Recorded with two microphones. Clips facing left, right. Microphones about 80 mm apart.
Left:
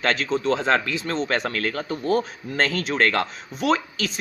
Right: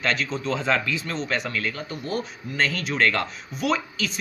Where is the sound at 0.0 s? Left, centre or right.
Left.